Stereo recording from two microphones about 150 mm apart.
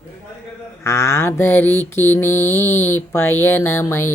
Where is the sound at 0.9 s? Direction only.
20° left (ahead or behind).